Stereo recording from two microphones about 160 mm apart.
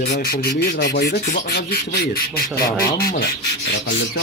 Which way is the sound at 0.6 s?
90° left.